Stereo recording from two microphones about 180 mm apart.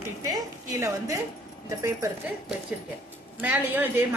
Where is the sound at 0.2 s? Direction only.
20° right (ahead or behind).